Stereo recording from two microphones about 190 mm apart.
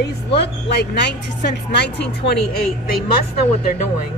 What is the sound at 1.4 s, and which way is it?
Speech, 65° left (ahead or behind).